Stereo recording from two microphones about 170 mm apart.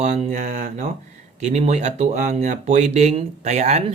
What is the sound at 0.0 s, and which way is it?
Speech, 45° right (ahead or behind).